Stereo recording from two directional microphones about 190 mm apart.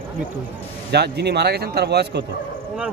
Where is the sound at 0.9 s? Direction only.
60° right (ahead or behind).